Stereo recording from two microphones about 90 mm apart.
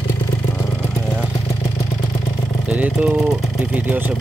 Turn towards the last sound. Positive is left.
turn(degrees=-20)  # may be behind; listen again after turning